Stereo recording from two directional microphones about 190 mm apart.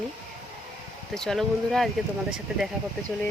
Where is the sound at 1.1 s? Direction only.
5° left (ahead or behind).